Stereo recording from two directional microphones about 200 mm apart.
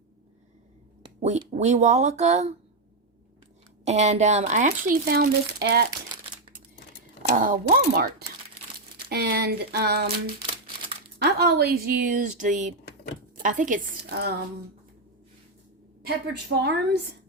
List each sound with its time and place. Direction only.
1.0 s speech: 35° right (ahead or behind)
3.8 s speech: 35° right (ahead or behind); by 5.8 s 55° right (ahead or behind)
7.3 s speech: 40° right (ahead or behind)
16.0 s a woman's voice: 55° right (ahead or behind)